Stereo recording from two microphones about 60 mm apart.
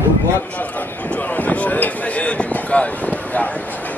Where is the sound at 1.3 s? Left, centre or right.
Left.